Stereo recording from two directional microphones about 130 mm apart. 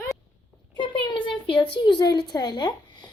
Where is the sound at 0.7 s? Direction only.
40° left (ahead or behind).